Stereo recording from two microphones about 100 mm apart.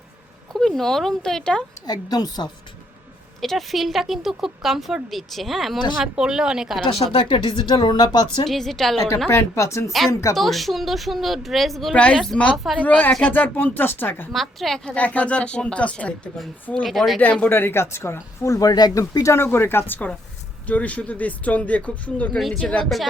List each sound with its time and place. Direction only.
0.6 s speech: 5° left (ahead or behind)
1.9 s a woman's voice: 40° left (ahead or behind)
3.4 s speech: centre (ahead or behind)
6.8 s speech: 60° left (ahead or behind)
8.4 s speech: 5° left (ahead or behind)
9.3 s a woman's voice: 30° left (ahead or behind)
10.3 s speech: centre (ahead or behind)
11.9 s speech: 10° left (ahead or behind)
14.3 s speech: centre (ahead or behind)
14.9 s speech: 15° left (ahead or behind)
16.8 s speech: centre (ahead or behind)
17.4 s speech: 20° left (ahead or behind)
22.4 s speech: 5° left (ahead or behind)